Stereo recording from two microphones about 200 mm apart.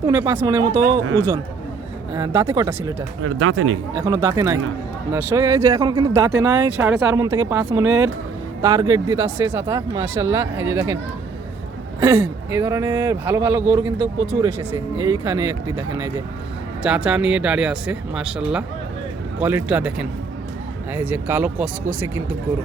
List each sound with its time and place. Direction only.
0.1 s speech: 10° right (ahead or behind)
2.1 s speech: 15° right (ahead or behind)
3.2 s speech: 90° right
3.9 s speech: 20° right (ahead or behind)
11.9 s speech: 10° right (ahead or behind)
16.8 s speech: 5° right (ahead or behind)